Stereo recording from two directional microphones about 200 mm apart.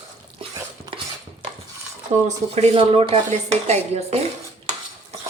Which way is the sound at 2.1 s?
35° right (ahead or behind).